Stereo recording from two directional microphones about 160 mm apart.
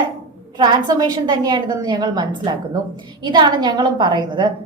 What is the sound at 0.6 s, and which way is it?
A woman's voice, 25° right (ahead or behind).